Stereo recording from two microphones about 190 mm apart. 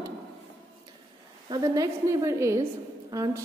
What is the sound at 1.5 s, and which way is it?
A woman's voice, 20° right (ahead or behind).